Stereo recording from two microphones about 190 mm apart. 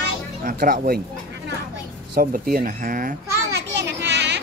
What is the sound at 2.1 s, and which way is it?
A child's voice, 50° right (ahead or behind).